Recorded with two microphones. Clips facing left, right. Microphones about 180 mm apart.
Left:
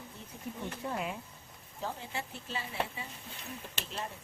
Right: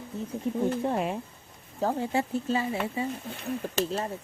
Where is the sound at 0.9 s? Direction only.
35° right (ahead or behind).